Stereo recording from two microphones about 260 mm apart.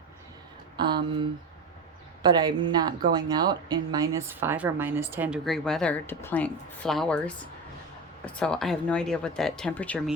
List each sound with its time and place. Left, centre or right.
0.8 s a woman's voice: centre